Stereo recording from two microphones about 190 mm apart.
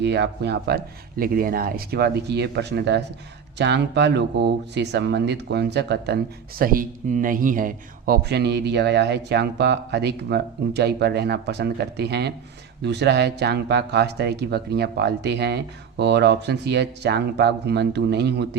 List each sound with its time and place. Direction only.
0.0 s speech: 60° right (ahead or behind)